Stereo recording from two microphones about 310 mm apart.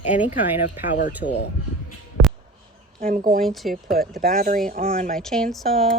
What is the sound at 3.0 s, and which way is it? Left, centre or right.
Speech, right.